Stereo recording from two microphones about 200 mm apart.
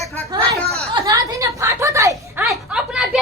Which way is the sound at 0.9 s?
15° right (ahead or behind).